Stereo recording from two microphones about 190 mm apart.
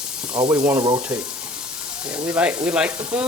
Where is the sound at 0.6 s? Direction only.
10° right (ahead or behind).